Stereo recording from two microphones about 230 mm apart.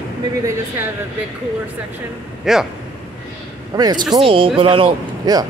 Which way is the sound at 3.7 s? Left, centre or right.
Centre.